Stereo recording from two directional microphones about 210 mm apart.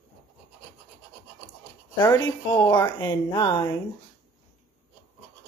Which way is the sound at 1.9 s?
20° left (ahead or behind).